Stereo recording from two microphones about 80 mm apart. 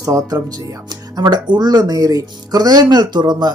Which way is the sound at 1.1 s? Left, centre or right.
Right.